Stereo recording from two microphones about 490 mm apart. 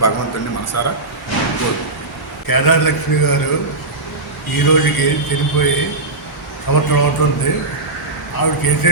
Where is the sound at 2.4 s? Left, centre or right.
Left.